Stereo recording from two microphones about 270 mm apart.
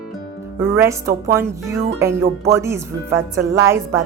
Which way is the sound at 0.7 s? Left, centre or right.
Centre.